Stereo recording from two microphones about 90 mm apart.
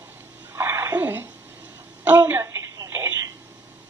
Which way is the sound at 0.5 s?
30° right (ahead or behind).